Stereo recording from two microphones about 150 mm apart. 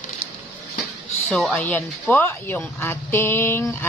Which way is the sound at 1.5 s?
10° left (ahead or behind).